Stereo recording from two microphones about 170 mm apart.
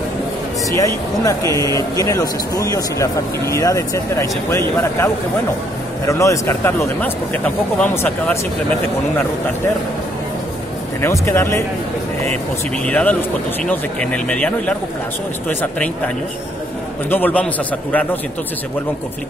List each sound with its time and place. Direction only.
0.7 s speech: 20° left (ahead or behind)
11.0 s speech: 15° left (ahead or behind)
12.8 s speech: 10° left (ahead or behind)
17.1 s speech: 10° left (ahead or behind)